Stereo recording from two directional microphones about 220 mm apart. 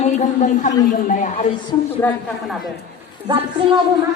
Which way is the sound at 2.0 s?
10° left (ahead or behind).